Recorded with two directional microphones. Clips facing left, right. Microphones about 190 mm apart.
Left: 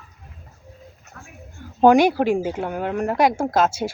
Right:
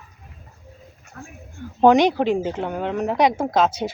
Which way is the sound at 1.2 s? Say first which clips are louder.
Right 6 dB; 40° right (ahead or behind).